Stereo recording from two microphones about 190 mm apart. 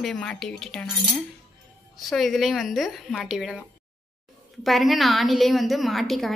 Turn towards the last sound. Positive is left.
turn(degrees=0)  # may be behind; listen again after turning